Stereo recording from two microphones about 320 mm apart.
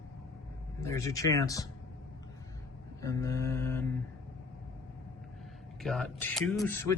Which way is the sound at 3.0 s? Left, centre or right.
Centre.